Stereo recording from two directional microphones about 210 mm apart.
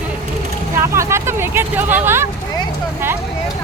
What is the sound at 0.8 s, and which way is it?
Vehicle, 15° right (ahead or behind).